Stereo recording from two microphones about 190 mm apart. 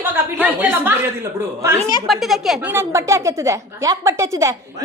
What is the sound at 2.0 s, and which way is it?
A woman's voice, centre (ahead or behind).